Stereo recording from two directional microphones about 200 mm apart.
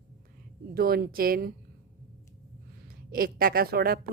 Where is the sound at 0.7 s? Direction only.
50° right (ahead or behind).